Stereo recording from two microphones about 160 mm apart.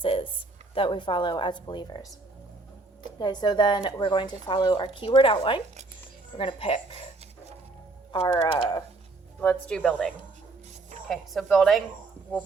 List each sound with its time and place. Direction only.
0.0 s a sound: 35° left (ahead or behind)
0.7 s speech: 35° left (ahead or behind)
3.2 s speech: 25° left (ahead or behind)
8.1 s speech: 30° left (ahead or behind)
9.4 s speech: 10° left (ahead or behind)
11.1 s speech: 5° left (ahead or behind)